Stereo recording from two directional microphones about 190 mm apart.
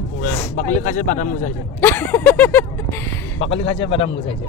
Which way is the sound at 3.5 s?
30° left (ahead or behind).